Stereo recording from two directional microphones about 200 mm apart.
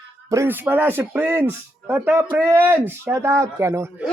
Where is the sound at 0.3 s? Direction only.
10° right (ahead or behind).